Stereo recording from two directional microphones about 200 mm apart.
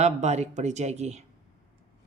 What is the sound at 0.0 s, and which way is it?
Mantra, 35° right (ahead or behind).